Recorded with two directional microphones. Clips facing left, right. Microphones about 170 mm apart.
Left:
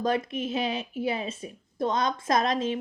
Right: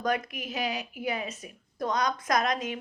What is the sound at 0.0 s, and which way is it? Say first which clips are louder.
A woman's voice: left 3 dB; 25° left (ahead or behind).